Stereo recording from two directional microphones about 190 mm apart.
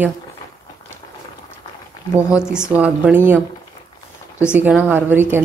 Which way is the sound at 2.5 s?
5° right (ahead or behind).